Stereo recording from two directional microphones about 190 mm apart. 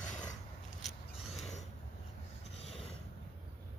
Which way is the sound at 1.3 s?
35° left (ahead or behind).